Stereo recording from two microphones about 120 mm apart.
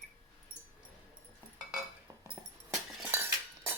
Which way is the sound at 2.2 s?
15° right (ahead or behind).